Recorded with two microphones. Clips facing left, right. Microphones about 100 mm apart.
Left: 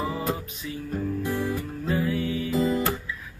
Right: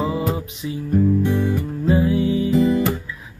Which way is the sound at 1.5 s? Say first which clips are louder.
Right 8 dB; 20° right (ahead or behind).